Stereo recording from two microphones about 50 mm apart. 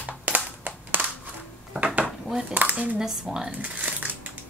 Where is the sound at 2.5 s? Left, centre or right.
Right.